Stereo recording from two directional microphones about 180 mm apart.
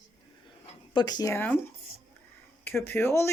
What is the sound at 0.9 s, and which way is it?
Speech, 25° left (ahead or behind).